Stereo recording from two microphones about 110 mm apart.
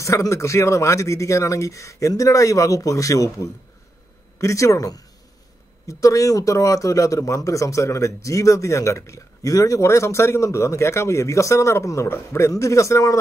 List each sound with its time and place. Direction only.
0.0 s speech: 30° left (ahead or behind)